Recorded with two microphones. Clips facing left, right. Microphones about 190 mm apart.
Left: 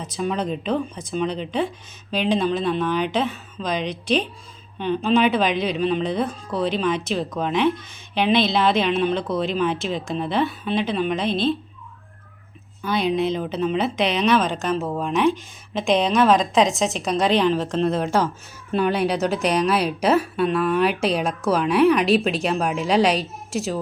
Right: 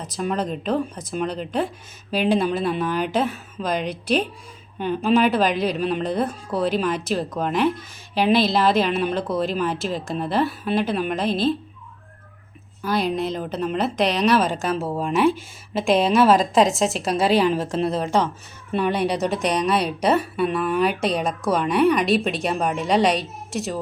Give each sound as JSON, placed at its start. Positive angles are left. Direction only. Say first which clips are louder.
{"t": 0.0, "sound": "a woman's voice", "louder": "even", "side_deg": 0}
{"t": 12.8, "sound": "a woman's voice", "louder": "left 1 dB", "side_deg": 0}